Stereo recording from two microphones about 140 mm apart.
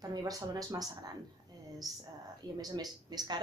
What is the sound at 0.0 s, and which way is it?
Speech, 25° right (ahead or behind).